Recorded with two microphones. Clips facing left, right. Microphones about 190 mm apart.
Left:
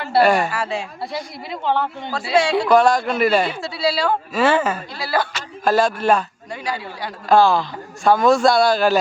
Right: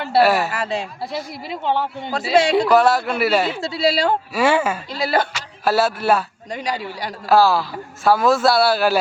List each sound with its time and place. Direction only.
0.1 s a man's voice: 5° right (ahead or behind)
1.6 s a man's voice: 15° right (ahead or behind)
2.6 s a man's voice: 5° right (ahead or behind)
3.6 s a woman's voice: 25° right (ahead or behind)
4.4 s a man's voice: 10° right (ahead or behind)
5.0 s a woman's voice: 20° right (ahead or behind)
5.3 s a man's voice: 5° right (ahead or behind)
7.3 s a man's voice: 5° right (ahead or behind)